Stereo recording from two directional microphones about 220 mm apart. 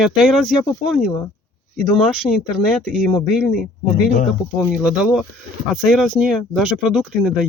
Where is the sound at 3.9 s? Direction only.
45° left (ahead or behind).